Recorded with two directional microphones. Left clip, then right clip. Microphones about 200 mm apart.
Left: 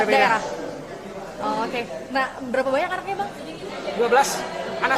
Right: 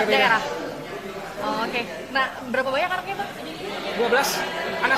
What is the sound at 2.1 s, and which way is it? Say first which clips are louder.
Speech: even; 35° left (ahead or behind).